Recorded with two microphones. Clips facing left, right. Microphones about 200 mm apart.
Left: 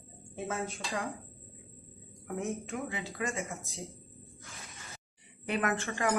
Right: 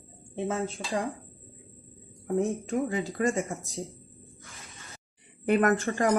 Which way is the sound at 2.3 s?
35° right (ahead or behind).